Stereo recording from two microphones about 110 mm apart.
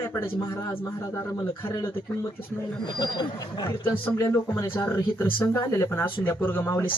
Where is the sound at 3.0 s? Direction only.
40° left (ahead or behind).